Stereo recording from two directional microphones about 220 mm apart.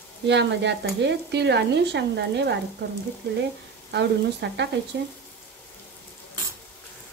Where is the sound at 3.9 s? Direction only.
50° right (ahead or behind).